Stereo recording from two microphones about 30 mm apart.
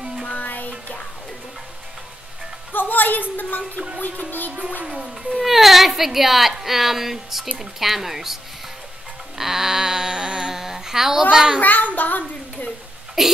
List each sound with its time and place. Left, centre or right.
0.3 s music: left
2.7 s a woman's voice: left
4.8 s speech: right
5.4 s speech: centre
9.4 s a sound: centre
11.6 s a child's voice: left
13.2 s speech: centre